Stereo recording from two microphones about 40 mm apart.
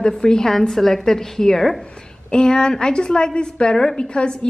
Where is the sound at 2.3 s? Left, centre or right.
Left.